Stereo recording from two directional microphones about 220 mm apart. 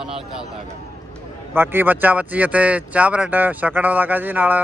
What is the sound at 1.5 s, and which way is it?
Speech, 10° right (ahead or behind).